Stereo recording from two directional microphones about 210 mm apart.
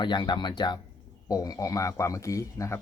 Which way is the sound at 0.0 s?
20° left (ahead or behind).